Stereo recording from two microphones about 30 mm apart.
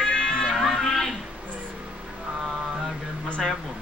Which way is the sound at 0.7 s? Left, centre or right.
Centre.